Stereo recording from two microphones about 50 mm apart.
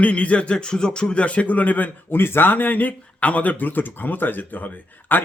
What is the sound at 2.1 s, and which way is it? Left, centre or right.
Speech, left.